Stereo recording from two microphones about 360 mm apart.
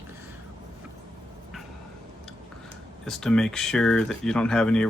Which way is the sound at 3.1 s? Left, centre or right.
Centre.